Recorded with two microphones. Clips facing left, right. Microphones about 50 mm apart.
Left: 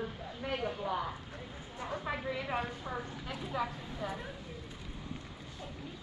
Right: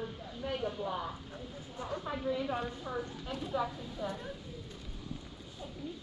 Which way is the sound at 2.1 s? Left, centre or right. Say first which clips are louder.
Right 2 dB; left.